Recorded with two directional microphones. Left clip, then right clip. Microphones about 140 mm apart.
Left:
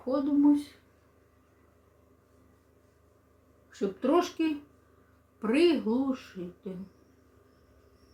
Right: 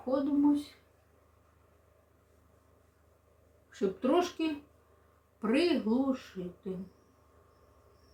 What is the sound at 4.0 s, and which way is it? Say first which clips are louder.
Speech: left 4 dB; 15° right (ahead or behind).